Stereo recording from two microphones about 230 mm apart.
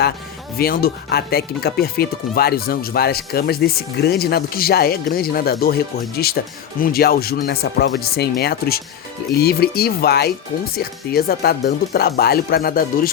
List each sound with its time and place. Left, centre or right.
0.5 s speech: left